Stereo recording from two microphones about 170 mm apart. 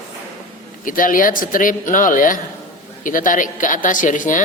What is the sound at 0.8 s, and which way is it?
A woman's voice, 50° left (ahead or behind).